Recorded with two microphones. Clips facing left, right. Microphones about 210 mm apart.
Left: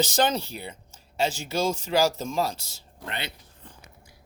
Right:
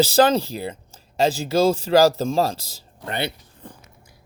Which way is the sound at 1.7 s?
35° right (ahead or behind).